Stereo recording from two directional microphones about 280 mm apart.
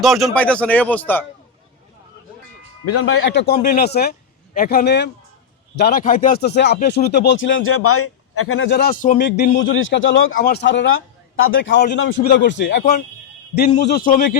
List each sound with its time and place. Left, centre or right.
0.0 s speech: centre
2.8 s a man's voice: left